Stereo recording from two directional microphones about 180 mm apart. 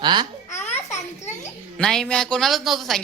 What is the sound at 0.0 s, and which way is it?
Speech, 25° right (ahead or behind).